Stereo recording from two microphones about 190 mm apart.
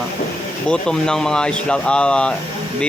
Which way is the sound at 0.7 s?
5° left (ahead or behind).